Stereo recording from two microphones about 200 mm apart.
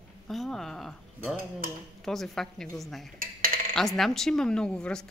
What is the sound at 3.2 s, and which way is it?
Dishes, 45° right (ahead or behind).